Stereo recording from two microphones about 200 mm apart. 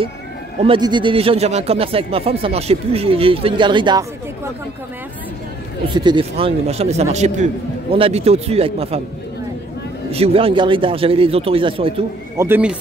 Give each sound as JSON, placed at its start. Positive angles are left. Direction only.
{"t": 0.6, "sound": "speech", "side_deg": -25}
{"t": 5.9, "sound": "a man's voice", "side_deg": -25}
{"t": 10.1, "sound": "speech", "side_deg": -30}
{"t": 12.4, "sound": "speech", "side_deg": -10}